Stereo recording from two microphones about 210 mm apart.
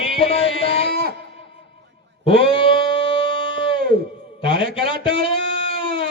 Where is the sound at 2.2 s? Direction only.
25° left (ahead or behind).